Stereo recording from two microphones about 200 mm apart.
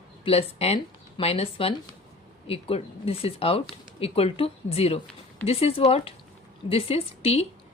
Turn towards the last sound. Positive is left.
turn(degrees=30)  # may be behind; listen again after turning